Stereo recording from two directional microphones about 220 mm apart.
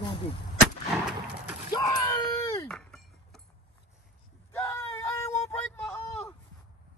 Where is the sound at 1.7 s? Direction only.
15° left (ahead or behind).